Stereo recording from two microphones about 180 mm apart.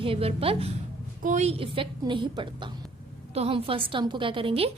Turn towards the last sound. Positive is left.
turn(degrees=-30)  # may be behind; listen again after turning